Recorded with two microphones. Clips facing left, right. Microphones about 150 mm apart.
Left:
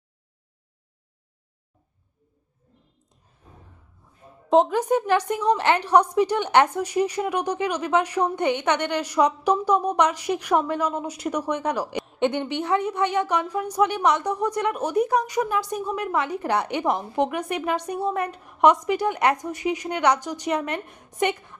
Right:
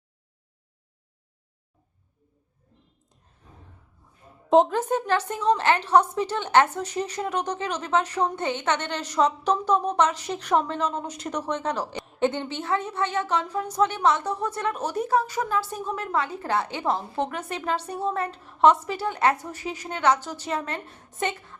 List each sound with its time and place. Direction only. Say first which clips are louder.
4.4 s speech: even; centre (ahead or behind)
4.8 s a woman's voice: left 3 dB; 15° left (ahead or behind)